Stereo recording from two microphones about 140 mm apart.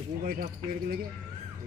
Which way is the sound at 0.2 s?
85° right.